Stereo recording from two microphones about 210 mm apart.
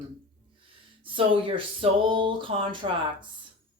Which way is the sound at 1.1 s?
25° right (ahead or behind).